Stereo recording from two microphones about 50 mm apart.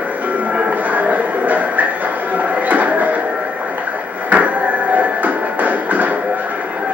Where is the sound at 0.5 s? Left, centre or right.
Right.